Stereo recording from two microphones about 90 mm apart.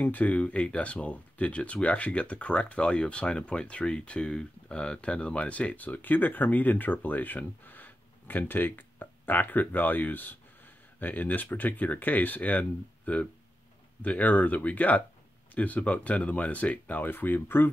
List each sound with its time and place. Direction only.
0.0 s speech: 20° left (ahead or behind)